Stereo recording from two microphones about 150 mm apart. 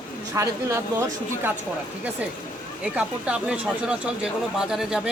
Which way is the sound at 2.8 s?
5° right (ahead or behind).